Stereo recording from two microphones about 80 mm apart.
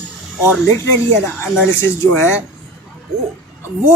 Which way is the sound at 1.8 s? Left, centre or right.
Left.